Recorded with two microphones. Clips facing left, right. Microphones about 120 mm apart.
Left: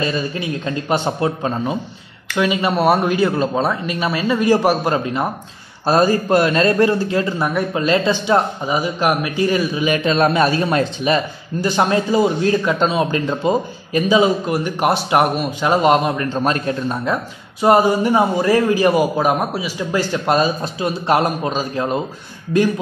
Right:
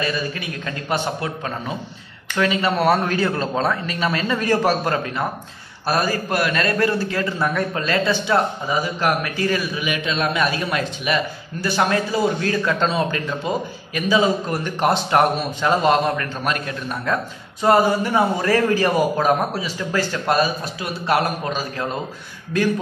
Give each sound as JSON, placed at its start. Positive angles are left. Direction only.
{"t": 0.0, "sound": "a man's voice", "side_deg": 25}
{"t": 9.8, "sound": "a man's voice", "side_deg": 40}
{"t": 17.0, "sound": "a man's voice", "side_deg": 15}